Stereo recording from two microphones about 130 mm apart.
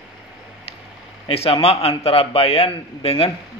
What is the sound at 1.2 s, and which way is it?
A man's voice, 50° left (ahead or behind).